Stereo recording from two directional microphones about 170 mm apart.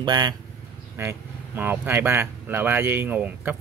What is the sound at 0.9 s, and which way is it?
Speech, 15° right (ahead or behind).